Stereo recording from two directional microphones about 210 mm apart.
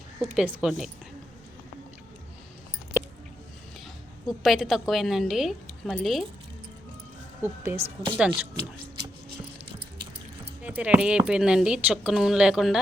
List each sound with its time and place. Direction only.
0.2 s a woman's voice: 5° right (ahead or behind)
4.3 s a woman's voice: centre (ahead or behind)
7.4 s speech: 10° right (ahead or behind)
7.9 s speech: 25° right (ahead or behind)
10.6 s a woman's voice: 5° right (ahead or behind)